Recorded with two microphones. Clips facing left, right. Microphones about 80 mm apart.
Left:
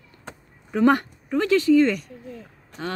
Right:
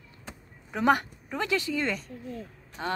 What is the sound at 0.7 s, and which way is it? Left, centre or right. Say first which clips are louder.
A woman's voice: left 5 dB; centre.